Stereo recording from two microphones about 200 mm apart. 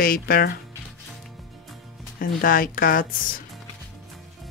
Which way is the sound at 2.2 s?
45° left (ahead or behind).